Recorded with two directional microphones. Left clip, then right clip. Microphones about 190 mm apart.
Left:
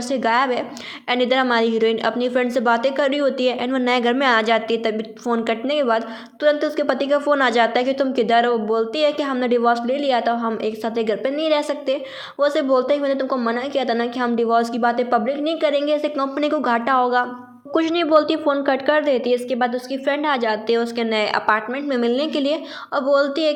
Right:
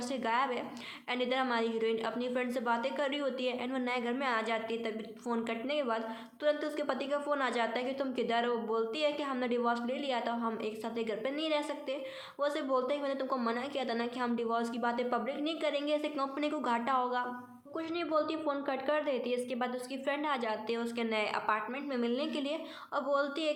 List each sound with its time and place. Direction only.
0.1 s a woman's voice: 25° left (ahead or behind)